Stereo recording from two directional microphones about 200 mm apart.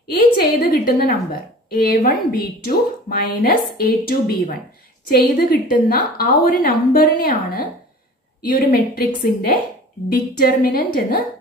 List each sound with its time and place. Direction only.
0.2 s a woman's voice: 45° left (ahead or behind)
8.4 s a woman's voice: 45° left (ahead or behind)